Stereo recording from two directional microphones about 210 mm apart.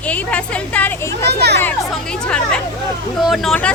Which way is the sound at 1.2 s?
50° right (ahead or behind).